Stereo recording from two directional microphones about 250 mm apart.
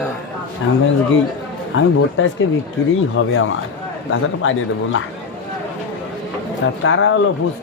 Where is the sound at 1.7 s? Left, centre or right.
Left.